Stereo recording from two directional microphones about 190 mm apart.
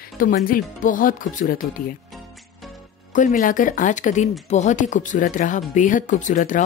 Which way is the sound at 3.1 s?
40° left (ahead or behind).